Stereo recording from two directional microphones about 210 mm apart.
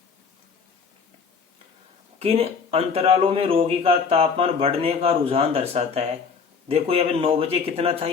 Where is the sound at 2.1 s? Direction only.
30° right (ahead or behind).